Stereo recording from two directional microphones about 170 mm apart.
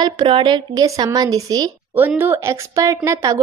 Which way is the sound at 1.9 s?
10° right (ahead or behind).